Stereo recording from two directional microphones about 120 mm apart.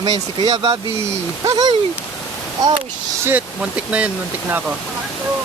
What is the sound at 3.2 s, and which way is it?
Speech, 10° right (ahead or behind).